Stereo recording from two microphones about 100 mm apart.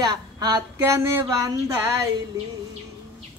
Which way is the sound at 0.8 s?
25° right (ahead or behind).